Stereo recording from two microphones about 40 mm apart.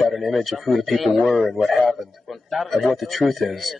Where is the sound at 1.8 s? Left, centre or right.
Centre.